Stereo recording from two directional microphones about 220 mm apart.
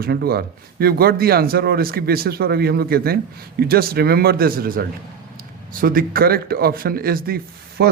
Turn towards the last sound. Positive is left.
turn(degrees=-45)  # may be behind; listen again after turning